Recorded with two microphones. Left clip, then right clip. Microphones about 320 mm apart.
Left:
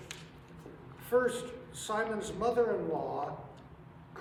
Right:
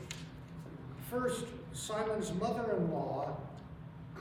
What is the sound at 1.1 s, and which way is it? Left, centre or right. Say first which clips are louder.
A man's voice: left 6 dB; centre.